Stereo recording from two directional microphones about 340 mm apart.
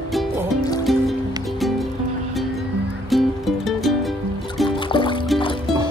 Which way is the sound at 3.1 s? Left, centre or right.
Centre.